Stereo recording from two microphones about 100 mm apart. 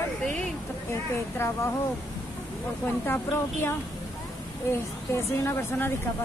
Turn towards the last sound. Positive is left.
turn(degrees=25)  # may be behind; listen again after turning